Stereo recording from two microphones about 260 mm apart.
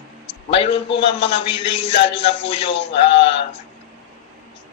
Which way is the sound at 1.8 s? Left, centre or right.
Left.